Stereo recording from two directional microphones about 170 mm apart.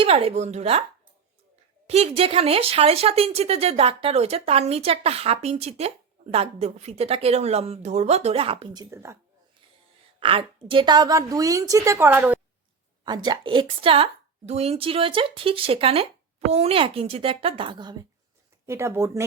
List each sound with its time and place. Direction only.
0.0 s speech: 35° right (ahead or behind)
1.9 s speech: 35° right (ahead or behind); by 9.1 s 15° right (ahead or behind)
10.2 s a woman's voice: 30° right (ahead or behind); by 12.4 s 10° right (ahead or behind)
13.1 s speech: 25° right (ahead or behind)